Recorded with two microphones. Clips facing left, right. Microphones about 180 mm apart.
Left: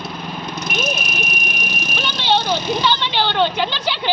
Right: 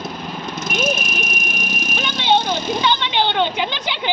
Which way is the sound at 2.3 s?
15° right (ahead or behind).